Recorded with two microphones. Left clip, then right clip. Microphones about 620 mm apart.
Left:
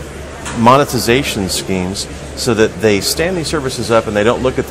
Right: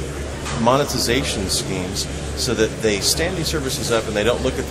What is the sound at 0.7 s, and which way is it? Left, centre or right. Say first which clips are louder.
Speech: left 7 dB; left.